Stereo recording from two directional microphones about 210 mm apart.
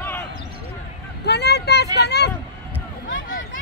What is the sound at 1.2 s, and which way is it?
Vehicle, 50° left (ahead or behind).